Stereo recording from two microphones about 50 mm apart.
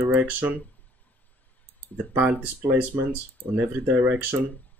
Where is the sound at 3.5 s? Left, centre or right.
Right.